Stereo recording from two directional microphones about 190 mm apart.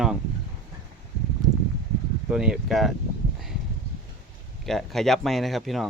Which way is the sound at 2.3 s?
5° right (ahead or behind).